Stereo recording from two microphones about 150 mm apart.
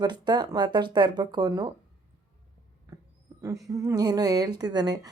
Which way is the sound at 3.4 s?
20° right (ahead or behind).